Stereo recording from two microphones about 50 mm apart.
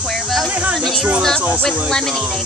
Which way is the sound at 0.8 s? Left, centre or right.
Centre.